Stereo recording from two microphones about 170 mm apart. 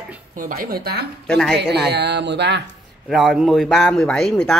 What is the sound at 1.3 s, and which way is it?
Speech, 5° left (ahead or behind).